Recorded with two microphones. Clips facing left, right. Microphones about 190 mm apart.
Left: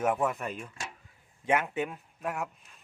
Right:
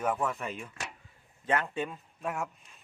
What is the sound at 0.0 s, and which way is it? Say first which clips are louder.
Speech: left 3 dB; 10° left (ahead or behind).